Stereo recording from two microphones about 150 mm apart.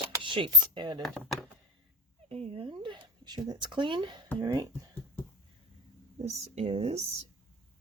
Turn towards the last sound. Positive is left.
turn(degrees=-45)  # may be behind; listen again after turning